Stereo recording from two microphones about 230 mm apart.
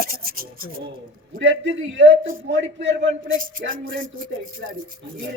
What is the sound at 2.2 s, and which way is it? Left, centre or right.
Speech, right.